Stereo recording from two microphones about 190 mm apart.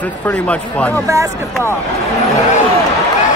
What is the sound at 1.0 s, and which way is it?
Speech, 15° right (ahead or behind).